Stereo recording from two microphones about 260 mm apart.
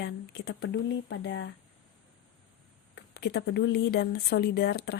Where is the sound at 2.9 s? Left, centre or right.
Left.